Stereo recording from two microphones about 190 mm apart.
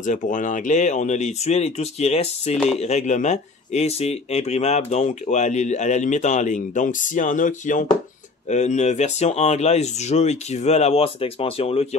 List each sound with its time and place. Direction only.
0.0 s speech: 40° left (ahead or behind)